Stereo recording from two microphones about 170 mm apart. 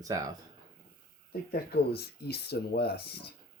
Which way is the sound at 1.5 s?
65° left (ahead or behind).